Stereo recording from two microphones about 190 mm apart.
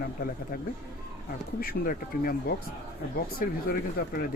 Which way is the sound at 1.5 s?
50° left (ahead or behind).